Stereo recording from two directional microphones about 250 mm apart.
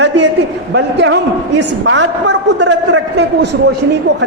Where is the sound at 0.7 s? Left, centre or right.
Right.